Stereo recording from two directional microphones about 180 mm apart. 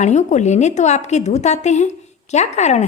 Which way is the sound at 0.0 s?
40° left (ahead or behind).